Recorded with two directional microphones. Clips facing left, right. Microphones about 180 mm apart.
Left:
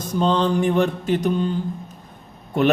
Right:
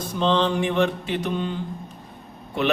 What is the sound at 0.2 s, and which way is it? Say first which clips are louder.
A man's voice: left 2 dB; 45° left (ahead or behind).